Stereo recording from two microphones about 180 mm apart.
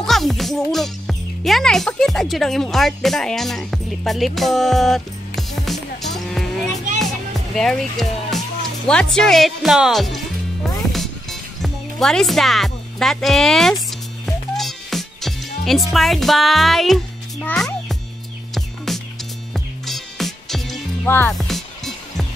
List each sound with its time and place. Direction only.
0.0 s music: centre (ahead or behind)
7.5 s speech: centre (ahead or behind)
10.9 s music: centre (ahead or behind)
15.9 s a child's voice: centre (ahead or behind)
18.9 s music: centre (ahead or behind)